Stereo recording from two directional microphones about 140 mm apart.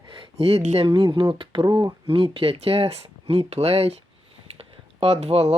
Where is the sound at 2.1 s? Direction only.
45° right (ahead or behind).